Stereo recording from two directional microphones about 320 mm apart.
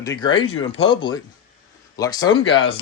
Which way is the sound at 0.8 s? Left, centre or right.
Centre.